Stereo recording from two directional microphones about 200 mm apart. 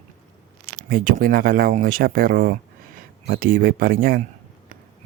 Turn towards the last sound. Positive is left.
turn(degrees=-45)  # may be behind; listen again after turning